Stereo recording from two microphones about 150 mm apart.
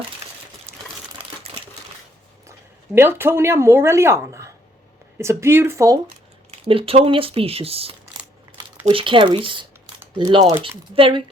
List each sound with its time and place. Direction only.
2.5 s speech: 15° right (ahead or behind)
6.1 s speech: 40° right (ahead or behind)